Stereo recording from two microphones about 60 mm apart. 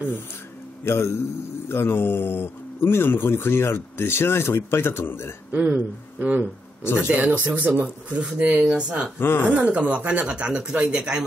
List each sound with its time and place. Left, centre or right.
0.8 s a man's voice: left
5.5 s speech: right
6.8 s speech: left
7.1 s speech: right
9.2 s speech: left
9.5 s speech: right